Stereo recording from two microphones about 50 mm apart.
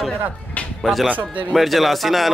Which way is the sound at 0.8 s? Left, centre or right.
Centre.